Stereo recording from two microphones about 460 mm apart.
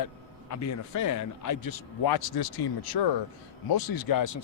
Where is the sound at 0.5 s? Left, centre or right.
Left.